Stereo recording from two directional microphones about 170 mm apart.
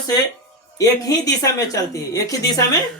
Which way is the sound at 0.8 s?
20° left (ahead or behind).